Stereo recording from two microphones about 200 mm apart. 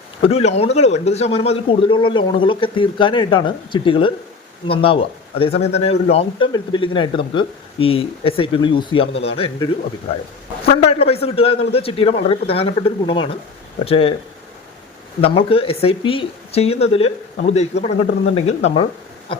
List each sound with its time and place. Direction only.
0.2 s speech: 30° left (ahead or behind)
10.7 s speech: 30° left (ahead or behind)
15.2 s speech: 30° left (ahead or behind)